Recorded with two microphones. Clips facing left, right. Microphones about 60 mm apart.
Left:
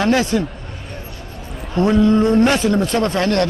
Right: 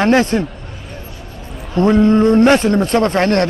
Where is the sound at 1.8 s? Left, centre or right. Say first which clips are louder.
Right 3 dB; right.